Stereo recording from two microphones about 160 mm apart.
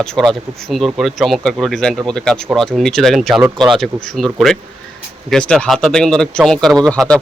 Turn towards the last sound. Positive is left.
turn(degrees=5)  # may be behind; listen again after turning